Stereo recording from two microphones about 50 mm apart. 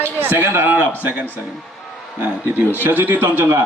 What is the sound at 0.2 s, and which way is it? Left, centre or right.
Speech, right.